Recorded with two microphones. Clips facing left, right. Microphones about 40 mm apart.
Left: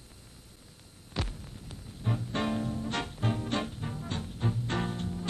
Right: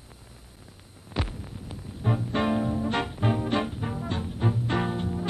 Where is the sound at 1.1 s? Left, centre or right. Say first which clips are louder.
Right 5 dB; centre.